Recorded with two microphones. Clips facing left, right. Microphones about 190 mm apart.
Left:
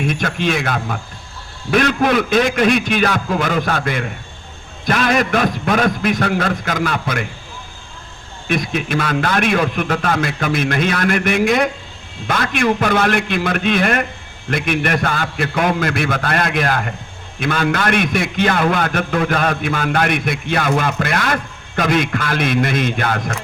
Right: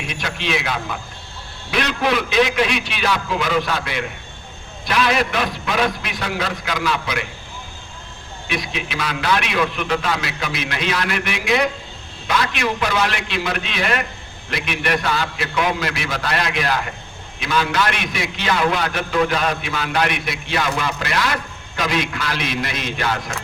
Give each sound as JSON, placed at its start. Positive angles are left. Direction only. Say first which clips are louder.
{"t": 0.0, "sound": "a man's voice", "louder": "left 8 dB", "side_deg": 50}
{"t": 8.4, "sound": "a man's voice", "louder": "left 7 dB", "side_deg": 50}